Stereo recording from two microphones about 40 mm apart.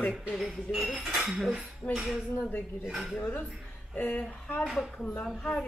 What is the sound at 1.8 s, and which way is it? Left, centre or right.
Speech, left.